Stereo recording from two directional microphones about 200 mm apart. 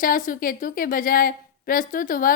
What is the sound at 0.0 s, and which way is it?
A woman's voice, 45° left (ahead or behind).